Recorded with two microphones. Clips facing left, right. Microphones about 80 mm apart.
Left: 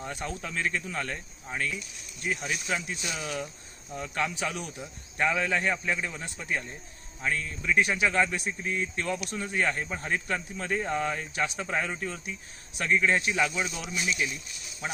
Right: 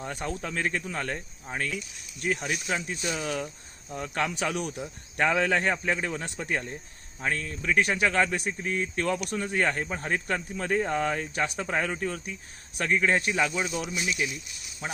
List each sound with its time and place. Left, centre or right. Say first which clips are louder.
0.0 s speech: right 2 dB; right
2.2 s speech: right 3 dB; right
2.6 s speech: right 3 dB; right
14.0 s speech: left 2 dB; left